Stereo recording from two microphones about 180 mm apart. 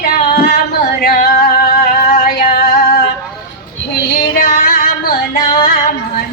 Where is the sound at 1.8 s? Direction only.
50° left (ahead or behind).